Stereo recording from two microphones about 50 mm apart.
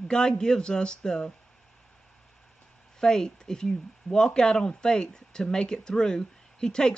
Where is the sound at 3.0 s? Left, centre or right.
Centre.